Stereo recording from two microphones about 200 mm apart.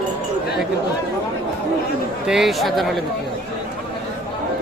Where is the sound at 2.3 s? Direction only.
Centre (ahead or behind).